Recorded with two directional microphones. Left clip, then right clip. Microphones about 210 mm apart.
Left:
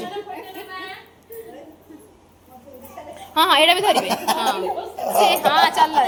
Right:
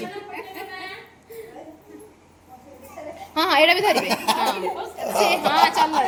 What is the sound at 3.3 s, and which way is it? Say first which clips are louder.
Speech: left 2 dB; 10° right (ahead or behind).